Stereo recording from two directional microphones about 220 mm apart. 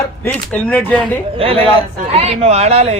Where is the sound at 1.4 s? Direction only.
25° right (ahead or behind).